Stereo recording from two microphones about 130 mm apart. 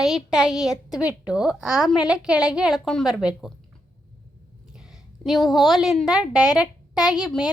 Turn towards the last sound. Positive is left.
turn(degrees=-5)  # may be behind; listen again after turning